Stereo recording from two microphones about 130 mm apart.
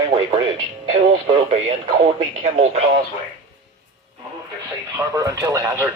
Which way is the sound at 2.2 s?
60° right (ahead or behind).